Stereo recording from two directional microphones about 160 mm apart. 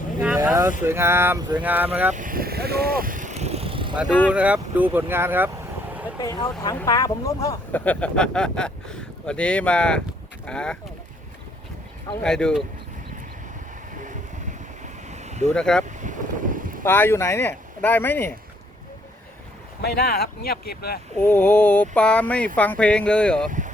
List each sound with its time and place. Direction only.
0.4 s speech: 20° right (ahead or behind)
2.1 s vehicle: 60° right (ahead or behind); by 3.9 s 35° right (ahead or behind)
4.3 s speech: 10° right (ahead or behind)
6.2 s speech: 25° left (ahead or behind)
7.9 s speech: 10° left (ahead or behind)
12.2 s speech: 5° left (ahead or behind)
15.0 s vehicle: 45° right (ahead or behind)
15.5 s speech: 5° left (ahead or behind)
15.9 s boat: 50° right (ahead or behind)
16.8 s speech: 15° left (ahead or behind)
19.8 s speech: 90° left; by 21.0 s 75° left (ahead or behind)
21.2 s speech: 10° left (ahead or behind)
23.5 s speech: 50° right (ahead or behind)